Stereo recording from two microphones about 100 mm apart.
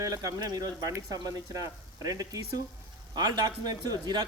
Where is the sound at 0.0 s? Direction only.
40° right (ahead or behind).